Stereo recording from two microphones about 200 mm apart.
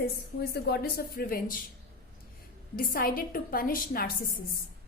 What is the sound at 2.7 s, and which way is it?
A woman's voice, 45° left (ahead or behind).